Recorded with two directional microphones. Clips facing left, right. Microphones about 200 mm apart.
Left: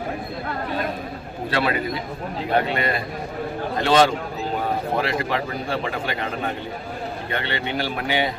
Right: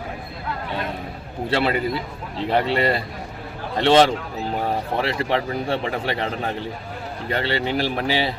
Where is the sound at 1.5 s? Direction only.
25° right (ahead or behind).